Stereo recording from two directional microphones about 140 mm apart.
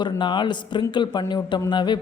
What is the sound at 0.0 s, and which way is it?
A man's voice, 35° left (ahead or behind).